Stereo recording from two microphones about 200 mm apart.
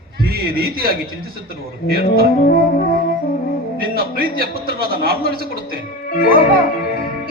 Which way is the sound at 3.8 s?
50° right (ahead or behind).